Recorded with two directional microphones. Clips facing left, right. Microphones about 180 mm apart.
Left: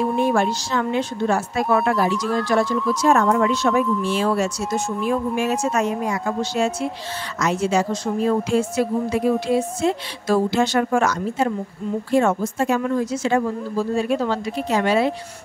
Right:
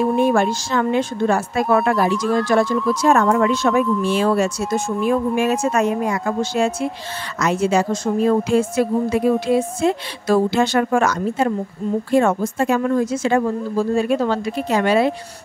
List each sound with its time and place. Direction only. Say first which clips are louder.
0.3 s a woman's voice: right 2 dB; 50° right (ahead or behind)